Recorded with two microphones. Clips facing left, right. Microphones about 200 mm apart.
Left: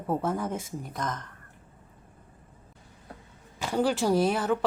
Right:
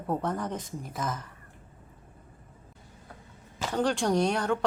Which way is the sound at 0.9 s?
5° right (ahead or behind).